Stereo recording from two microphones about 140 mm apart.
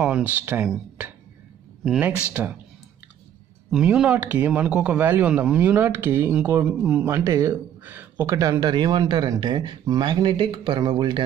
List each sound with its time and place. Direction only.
0.0 s a man's voice: 10° right (ahead or behind)
3.7 s a man's voice: 5° right (ahead or behind)
7.1 s speech: 20° right (ahead or behind)
8.4 s a man's voice: 25° right (ahead or behind)